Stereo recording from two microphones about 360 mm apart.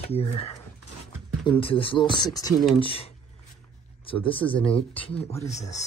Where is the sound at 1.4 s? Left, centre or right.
Centre.